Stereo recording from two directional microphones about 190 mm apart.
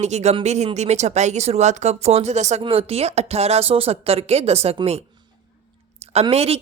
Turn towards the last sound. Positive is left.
turn(degrees=-30)  # may be behind; listen again after turning